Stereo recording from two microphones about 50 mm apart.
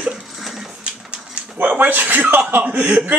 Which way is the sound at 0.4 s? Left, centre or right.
Centre.